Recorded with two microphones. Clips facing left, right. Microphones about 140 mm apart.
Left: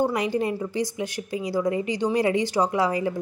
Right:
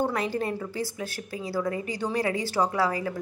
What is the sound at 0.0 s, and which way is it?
A woman's voice, 15° left (ahead or behind).